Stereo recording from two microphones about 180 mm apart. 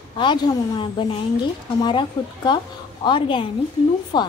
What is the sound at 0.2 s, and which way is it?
A woman's voice, 25° left (ahead or behind).